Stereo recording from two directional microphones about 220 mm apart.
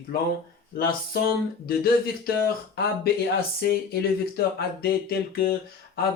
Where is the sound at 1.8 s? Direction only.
45° left (ahead or behind).